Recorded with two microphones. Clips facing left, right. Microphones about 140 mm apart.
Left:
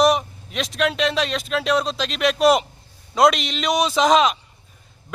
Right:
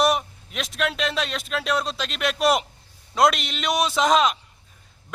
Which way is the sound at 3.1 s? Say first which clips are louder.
Left 3 dB; centre (ahead or behind).